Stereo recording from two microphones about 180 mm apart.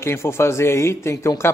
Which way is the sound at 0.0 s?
15° left (ahead or behind).